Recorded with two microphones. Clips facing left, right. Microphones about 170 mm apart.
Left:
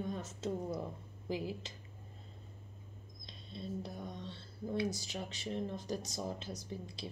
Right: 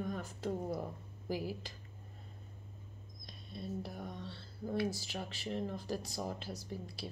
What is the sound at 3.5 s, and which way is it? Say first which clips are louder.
A woman's voice: even; 25° left (ahead or behind).